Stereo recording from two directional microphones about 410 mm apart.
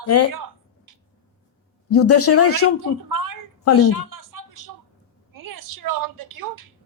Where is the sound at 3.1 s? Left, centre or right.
Right.